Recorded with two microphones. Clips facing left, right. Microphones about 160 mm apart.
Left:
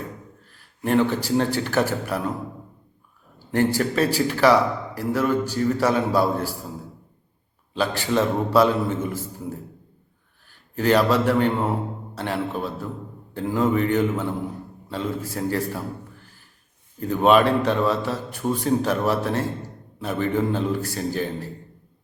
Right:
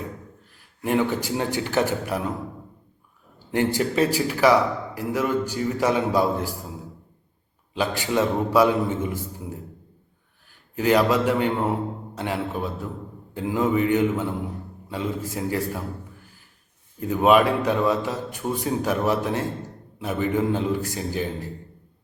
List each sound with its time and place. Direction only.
0.9 s a man's voice: 15° right (ahead or behind)
3.3 s a man's voice: 15° right (ahead or behind)
7.7 s a man's voice: 15° right (ahead or behind)
10.8 s a man's voice: 15° right (ahead or behind)
17.0 s a man's voice: 10° right (ahead or behind)